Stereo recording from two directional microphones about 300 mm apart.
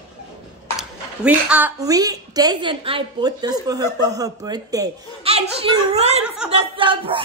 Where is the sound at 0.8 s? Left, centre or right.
Centre; by 6.2 s right.